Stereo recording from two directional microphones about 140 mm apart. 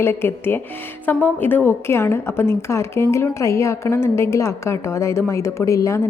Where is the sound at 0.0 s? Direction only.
15° left (ahead or behind).